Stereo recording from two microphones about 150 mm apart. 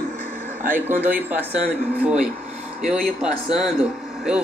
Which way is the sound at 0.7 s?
15° right (ahead or behind).